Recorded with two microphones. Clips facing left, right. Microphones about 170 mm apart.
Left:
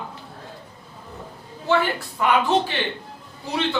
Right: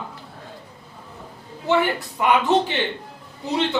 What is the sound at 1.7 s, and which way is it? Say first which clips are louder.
Speech: right 1 dB; 20° right (ahead or behind).